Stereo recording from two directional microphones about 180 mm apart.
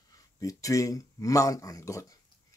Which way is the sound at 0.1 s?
20° left (ahead or behind).